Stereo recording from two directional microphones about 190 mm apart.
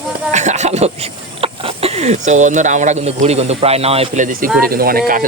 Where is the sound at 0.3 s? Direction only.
40° right (ahead or behind).